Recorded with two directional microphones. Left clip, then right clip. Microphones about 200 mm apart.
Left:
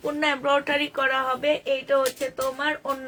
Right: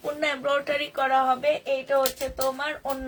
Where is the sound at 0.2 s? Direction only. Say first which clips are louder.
Left 3 dB; 30° left (ahead or behind).